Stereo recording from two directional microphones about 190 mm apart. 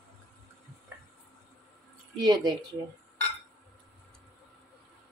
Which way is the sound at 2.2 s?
20° right (ahead or behind).